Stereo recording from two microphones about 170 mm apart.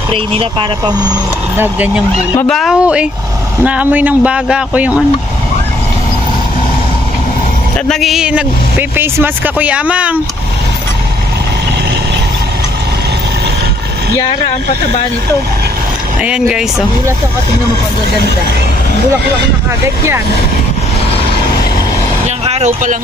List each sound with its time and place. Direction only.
0.1 s speech: 30° right (ahead or behind)
2.4 s speech: centre (ahead or behind)
7.9 s speech: centre (ahead or behind)
16.2 s speech: 5° right (ahead or behind)
22.5 s speech: 40° right (ahead or behind)